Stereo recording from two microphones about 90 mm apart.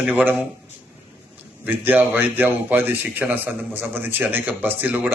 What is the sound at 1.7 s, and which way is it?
A man's voice, 20° right (ahead or behind).